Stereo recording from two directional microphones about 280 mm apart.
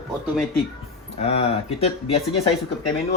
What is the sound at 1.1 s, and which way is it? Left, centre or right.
Speech, left.